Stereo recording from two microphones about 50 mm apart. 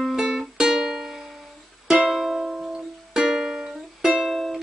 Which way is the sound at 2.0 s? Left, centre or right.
Centre.